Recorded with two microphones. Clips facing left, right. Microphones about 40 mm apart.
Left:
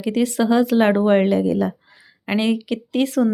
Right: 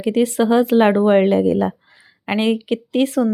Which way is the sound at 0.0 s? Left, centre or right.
Right.